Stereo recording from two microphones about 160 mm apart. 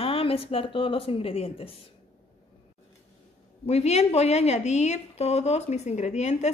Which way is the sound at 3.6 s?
40° left (ahead or behind).